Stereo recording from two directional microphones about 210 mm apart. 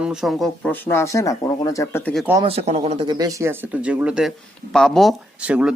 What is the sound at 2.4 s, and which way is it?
Speech, 30° right (ahead or behind).